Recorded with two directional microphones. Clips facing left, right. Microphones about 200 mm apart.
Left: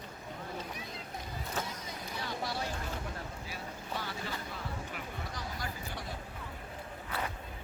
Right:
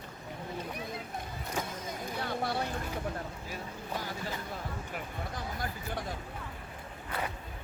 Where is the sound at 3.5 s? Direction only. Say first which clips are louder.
Right 2 dB; 45° right (ahead or behind).